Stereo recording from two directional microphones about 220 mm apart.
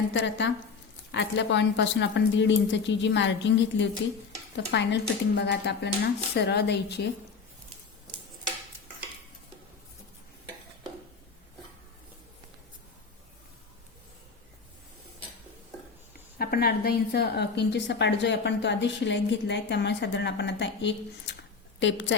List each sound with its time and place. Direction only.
0.1 s a woman's voice: 55° left (ahead or behind)
16.4 s a woman's voice: 45° left (ahead or behind)